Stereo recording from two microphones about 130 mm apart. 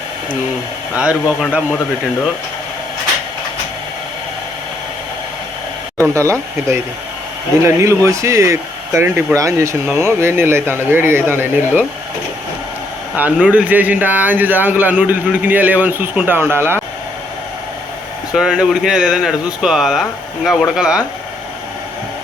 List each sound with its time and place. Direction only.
0.9 s speech: 10° right (ahead or behind)
7.6 s speech: 25° right (ahead or behind)
13.1 s speech: 10° right (ahead or behind)
18.3 s speech: 5° right (ahead or behind)